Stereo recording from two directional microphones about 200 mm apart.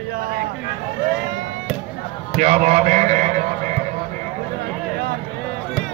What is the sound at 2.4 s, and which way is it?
A man's voice, 35° right (ahead or behind).